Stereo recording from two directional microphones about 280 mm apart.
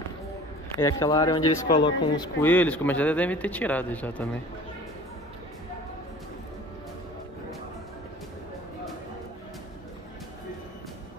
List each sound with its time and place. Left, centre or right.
0.7 s speech: centre
1.6 s speech: left
2.1 s speech: centre